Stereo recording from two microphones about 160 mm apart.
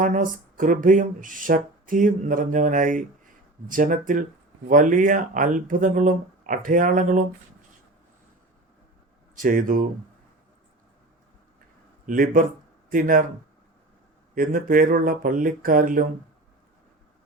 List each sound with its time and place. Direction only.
0.0 s speech: 55° right (ahead or behind)
9.4 s speech: 60° right (ahead or behind)
12.0 s speech: 60° right (ahead or behind)
14.3 s speech: 60° right (ahead or behind)